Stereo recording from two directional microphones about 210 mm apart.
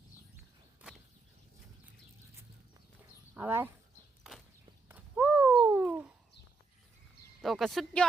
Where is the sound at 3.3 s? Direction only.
10° right (ahead or behind).